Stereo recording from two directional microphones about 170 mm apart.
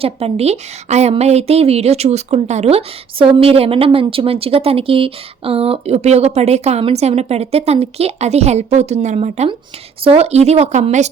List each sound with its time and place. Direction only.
0.0 s speech: 35° right (ahead or behind)